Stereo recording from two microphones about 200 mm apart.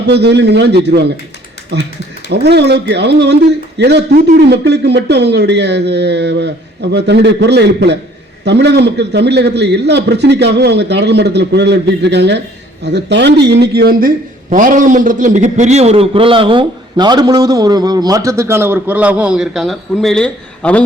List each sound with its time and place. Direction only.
0.1 s a man's voice: 55° right (ahead or behind)
14.5 s a man's voice: 40° right (ahead or behind); by 20.8 s 5° left (ahead or behind)